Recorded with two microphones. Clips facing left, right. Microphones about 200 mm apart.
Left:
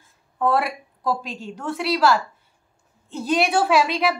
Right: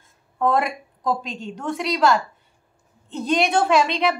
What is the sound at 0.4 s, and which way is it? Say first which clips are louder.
A woman's voice: right 1 dB; 5° left (ahead or behind).